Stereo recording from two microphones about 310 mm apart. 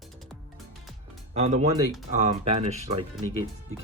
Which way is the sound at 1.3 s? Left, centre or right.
Right.